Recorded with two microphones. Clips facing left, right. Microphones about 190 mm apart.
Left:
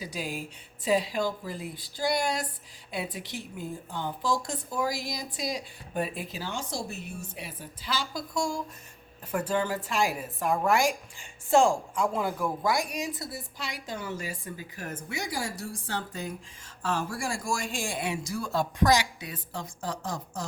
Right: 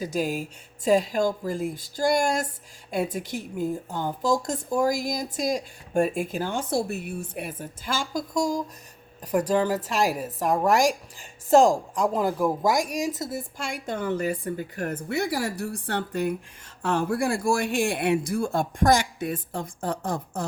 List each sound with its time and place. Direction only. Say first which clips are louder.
0.0 s a woman's voice: right 8 dB; 45° right (ahead or behind)